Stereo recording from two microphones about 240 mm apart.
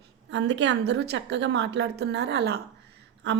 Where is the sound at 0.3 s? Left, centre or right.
Right.